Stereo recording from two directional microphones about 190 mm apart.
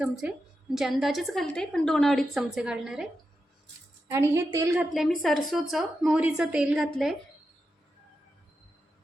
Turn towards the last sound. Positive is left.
turn(degrees=0)  # may be behind; listen again after turning